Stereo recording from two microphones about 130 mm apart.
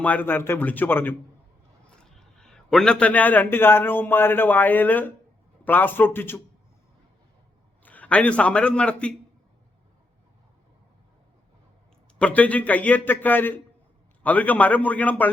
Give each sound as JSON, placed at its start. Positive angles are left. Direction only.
{"t": 0.0, "sound": "a man's voice", "side_deg": 15}
{"t": 2.0, "sound": "a man's voice", "side_deg": 5}
{"t": 7.9, "sound": "a man's voice", "side_deg": 10}
{"t": 12.2, "sound": "a man's voice", "side_deg": 10}